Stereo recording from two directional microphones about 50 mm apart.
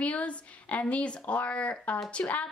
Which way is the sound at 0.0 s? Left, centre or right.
Left.